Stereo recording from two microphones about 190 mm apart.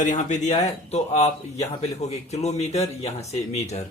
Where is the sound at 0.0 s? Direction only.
40° left (ahead or behind).